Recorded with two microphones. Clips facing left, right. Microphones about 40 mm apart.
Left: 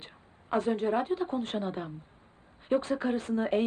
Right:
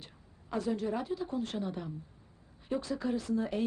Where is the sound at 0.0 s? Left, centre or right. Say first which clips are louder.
Left 4 dB; left.